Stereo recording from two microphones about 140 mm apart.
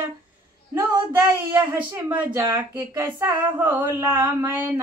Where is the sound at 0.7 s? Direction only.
15° right (ahead or behind).